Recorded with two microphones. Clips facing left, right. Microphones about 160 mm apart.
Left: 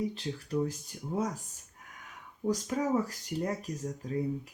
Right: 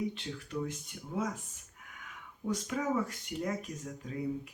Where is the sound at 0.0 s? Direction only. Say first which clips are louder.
Left 2 dB; 35° left (ahead or behind).